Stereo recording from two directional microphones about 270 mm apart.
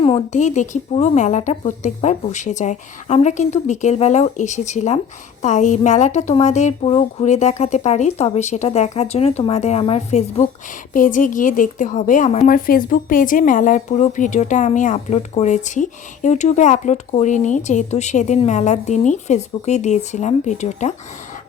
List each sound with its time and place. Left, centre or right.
0.0 s a woman's voice: left